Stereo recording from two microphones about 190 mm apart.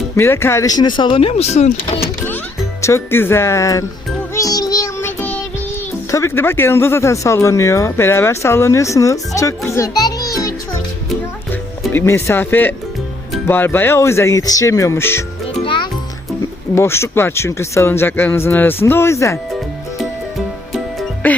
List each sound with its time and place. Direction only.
0.2 s speech: 15° left (ahead or behind); by 2.0 s 35° left (ahead or behind)
2.0 s a sound: 10° left (ahead or behind)
2.8 s speech: 15° left (ahead or behind)
4.4 s child singing: 20° left (ahead or behind)
6.1 s speech: 15° left (ahead or behind)
11.9 s speech: 10° left (ahead or behind)
15.6 s music: 25° left (ahead or behind)
16.7 s speech: 15° left (ahead or behind)
21.2 s speech: 10° left (ahead or behind)